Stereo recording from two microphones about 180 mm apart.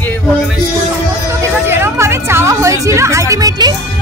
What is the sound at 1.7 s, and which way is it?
Music, 15° right (ahead or behind).